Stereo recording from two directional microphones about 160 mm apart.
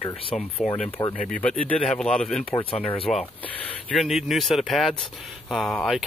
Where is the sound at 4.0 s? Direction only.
Centre (ahead or behind).